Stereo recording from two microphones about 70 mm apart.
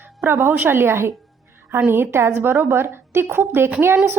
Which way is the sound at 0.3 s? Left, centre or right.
Right.